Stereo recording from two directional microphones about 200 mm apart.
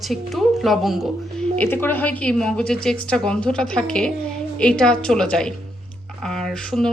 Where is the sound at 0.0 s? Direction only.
Centre (ahead or behind).